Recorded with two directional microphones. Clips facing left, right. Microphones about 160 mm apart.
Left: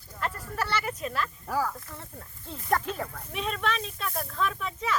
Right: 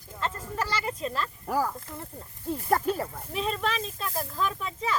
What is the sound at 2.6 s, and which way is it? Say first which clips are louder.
Snake: right 2 dB; 35° right (ahead or behind).